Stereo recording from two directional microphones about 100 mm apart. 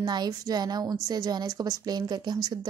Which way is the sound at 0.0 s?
45° right (ahead or behind).